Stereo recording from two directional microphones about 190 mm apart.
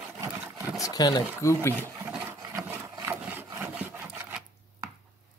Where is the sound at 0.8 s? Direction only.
20° left (ahead or behind).